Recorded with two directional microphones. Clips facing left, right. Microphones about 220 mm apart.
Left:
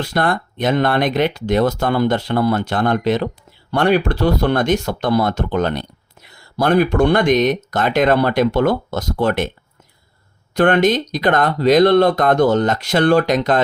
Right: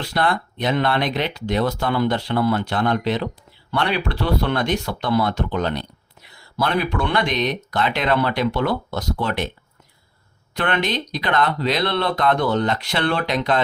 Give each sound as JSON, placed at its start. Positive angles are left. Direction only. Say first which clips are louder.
{"t": 0.0, "sound": "speech", "louder": "left 3 dB", "side_deg": 45}
{"t": 10.5, "sound": "speech", "louder": "left 9 dB", "side_deg": 45}